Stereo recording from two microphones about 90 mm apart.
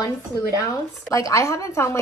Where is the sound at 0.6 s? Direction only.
35° left (ahead or behind).